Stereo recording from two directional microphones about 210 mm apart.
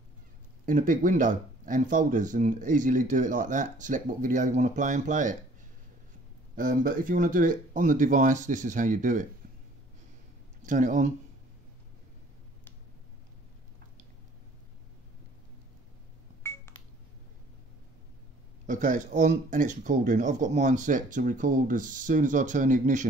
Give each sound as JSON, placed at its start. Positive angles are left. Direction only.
{"t": 0.7, "sound": "speech", "side_deg": -40}
{"t": 6.5, "sound": "speech", "side_deg": -40}
{"t": 10.6, "sound": "speech", "side_deg": -40}
{"t": 18.7, "sound": "speech", "side_deg": -40}